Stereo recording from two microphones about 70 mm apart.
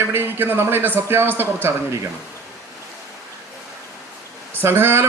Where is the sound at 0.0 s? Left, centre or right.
Right.